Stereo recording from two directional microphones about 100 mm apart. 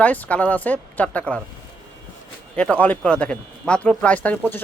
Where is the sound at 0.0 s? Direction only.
15° left (ahead or behind).